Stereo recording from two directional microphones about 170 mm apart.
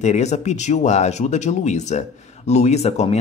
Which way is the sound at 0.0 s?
40° left (ahead or behind).